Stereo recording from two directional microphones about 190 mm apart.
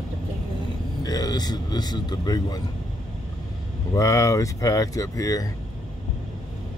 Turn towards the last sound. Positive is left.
turn(degrees=20)  # may be behind; listen again after turning